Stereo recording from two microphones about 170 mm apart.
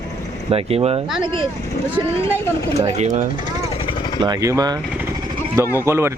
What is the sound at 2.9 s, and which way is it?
Speech, 45° right (ahead or behind).